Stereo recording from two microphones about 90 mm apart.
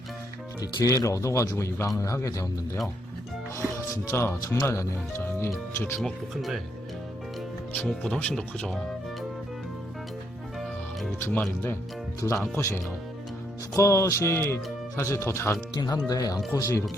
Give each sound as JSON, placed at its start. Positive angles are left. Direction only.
{"t": 0.6, "sound": "speech", "side_deg": 40}
{"t": 3.9, "sound": "speech", "side_deg": 30}
{"t": 6.0, "sound": "speech", "side_deg": 0}
{"t": 7.9, "sound": "speech", "side_deg": 10}
{"t": 11.2, "sound": "speech", "side_deg": 20}
{"t": 12.5, "sound": "speech", "side_deg": 25}
{"t": 15.7, "sound": "speech", "side_deg": 45}